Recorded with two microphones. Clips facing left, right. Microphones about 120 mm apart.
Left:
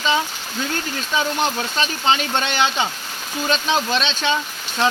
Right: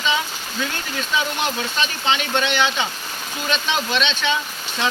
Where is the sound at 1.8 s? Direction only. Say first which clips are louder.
Left 3 dB; 40° left (ahead or behind).